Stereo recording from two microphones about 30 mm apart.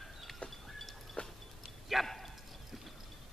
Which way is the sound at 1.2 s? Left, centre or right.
Left.